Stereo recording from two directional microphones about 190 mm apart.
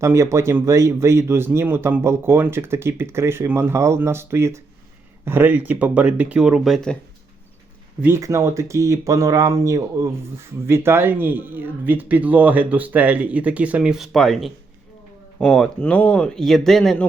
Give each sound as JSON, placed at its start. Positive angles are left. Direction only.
{"t": 0.0, "sound": "speech", "side_deg": -15}
{"t": 8.0, "sound": "speech", "side_deg": -15}